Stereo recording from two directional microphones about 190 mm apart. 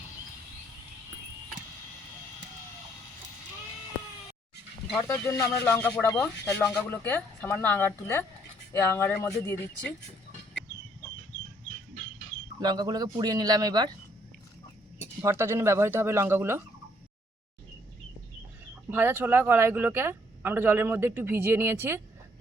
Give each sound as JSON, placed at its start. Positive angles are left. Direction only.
{"t": 4.9, "sound": "speech", "side_deg": 15}
{"t": 12.5, "sound": "a man's voice", "side_deg": -20}
{"t": 15.2, "sound": "speech", "side_deg": -15}
{"t": 18.9, "sound": "speech", "side_deg": -10}